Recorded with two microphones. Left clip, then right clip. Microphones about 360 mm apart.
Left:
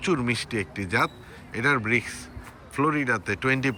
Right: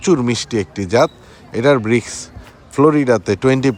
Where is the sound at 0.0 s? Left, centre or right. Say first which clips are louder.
Right 10 dB; centre.